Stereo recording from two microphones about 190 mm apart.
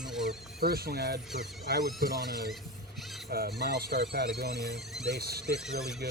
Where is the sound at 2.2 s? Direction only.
55° right (ahead or behind).